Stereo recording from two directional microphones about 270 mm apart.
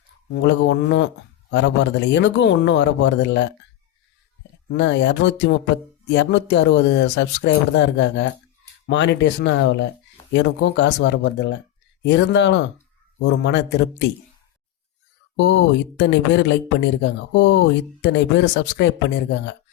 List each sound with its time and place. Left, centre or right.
0.3 s speech: left
4.7 s speech: left
15.4 s speech: left